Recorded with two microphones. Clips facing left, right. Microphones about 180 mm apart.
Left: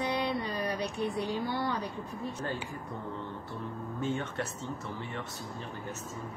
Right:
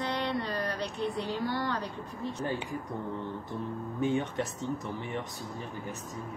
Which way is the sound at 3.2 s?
15° right (ahead or behind).